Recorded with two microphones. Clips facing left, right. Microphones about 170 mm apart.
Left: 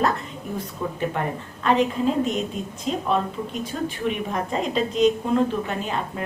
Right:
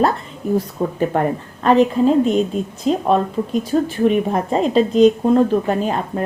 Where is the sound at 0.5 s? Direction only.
40° right (ahead or behind).